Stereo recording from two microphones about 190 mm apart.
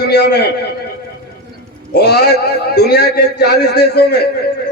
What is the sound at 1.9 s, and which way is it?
A man's voice, 60° left (ahead or behind).